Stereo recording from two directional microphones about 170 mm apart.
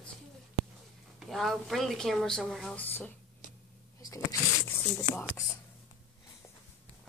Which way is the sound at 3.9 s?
20° left (ahead or behind).